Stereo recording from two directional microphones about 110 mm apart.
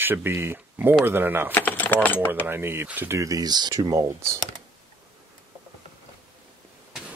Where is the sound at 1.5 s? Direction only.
15° left (ahead or behind).